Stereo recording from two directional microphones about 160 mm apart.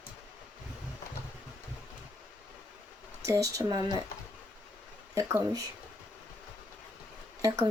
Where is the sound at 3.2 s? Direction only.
20° right (ahead or behind).